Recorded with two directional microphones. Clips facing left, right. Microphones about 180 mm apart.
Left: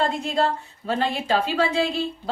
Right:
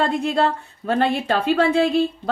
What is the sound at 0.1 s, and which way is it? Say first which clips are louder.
A woman's voice: right 3 dB; 55° right (ahead or behind).